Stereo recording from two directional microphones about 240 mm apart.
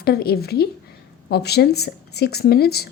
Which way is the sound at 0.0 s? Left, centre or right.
Left.